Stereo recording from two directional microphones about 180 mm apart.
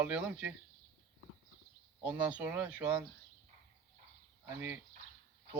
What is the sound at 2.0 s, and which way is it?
A man's voice, 10° right (ahead or behind).